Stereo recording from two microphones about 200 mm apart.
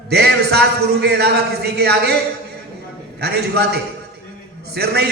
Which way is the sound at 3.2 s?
55° right (ahead or behind).